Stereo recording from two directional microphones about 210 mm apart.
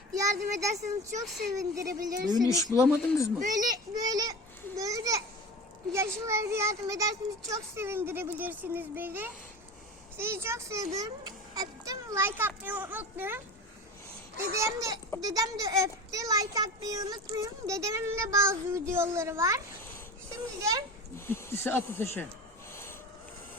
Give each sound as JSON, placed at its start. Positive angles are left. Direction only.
{"t": 0.1, "sound": "a child's voice", "side_deg": -15}
{"t": 0.7, "sound": "speech", "side_deg": -35}
{"t": 1.2, "sound": "speech", "side_deg": 0}
{"t": 1.5, "sound": "a child's voice", "side_deg": -15}
{"t": 2.7, "sound": "speech", "side_deg": 15}
{"t": 3.7, "sound": "a child's voice", "side_deg": -20}
{"t": 14.5, "sound": "a child's voice", "side_deg": -15}
{"t": 21.2, "sound": "speech", "side_deg": 10}
{"t": 22.7, "sound": "a sound", "side_deg": 10}